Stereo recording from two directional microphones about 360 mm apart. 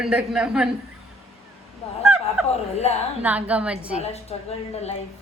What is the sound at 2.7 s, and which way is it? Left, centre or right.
Speech, centre.